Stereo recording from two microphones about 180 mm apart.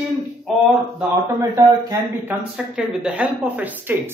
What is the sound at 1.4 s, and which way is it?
Speech, 15° right (ahead or behind).